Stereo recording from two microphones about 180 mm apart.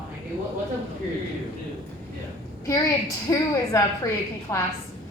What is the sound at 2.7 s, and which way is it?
A woman's voice, 20° left (ahead or behind).